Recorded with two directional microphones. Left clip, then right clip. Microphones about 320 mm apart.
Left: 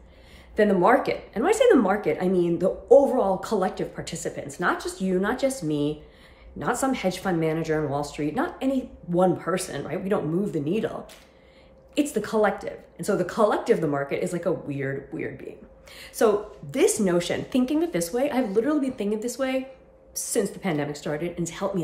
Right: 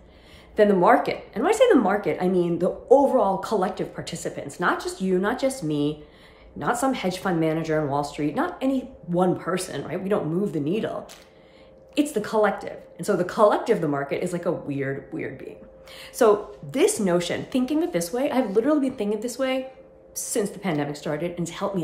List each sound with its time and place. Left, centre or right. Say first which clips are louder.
0.6 s speech: right 2 dB; centre